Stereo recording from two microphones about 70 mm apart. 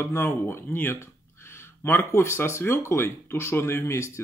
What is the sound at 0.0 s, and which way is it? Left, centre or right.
Speech, left.